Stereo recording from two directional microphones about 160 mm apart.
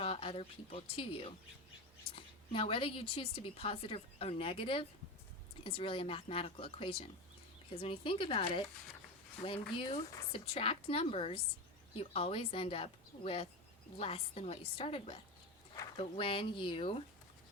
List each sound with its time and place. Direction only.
0.0 s a woman's voice: 35° left (ahead or behind)